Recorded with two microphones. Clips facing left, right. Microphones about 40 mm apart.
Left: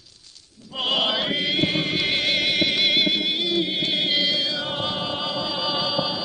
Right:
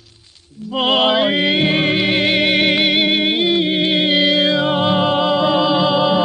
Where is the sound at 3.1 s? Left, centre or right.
Right.